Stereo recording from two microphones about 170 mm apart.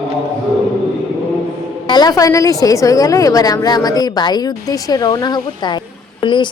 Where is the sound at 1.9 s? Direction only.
25° left (ahead or behind).